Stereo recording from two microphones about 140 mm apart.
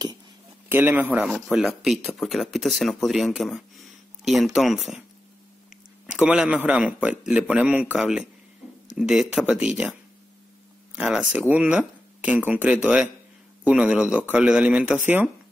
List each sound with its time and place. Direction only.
0.7 s a man's voice: 15° right (ahead or behind)
1.8 s speech: centre (ahead or behind)
6.0 s a man's voice: 5° right (ahead or behind)
11.0 s a man's voice: 10° right (ahead or behind)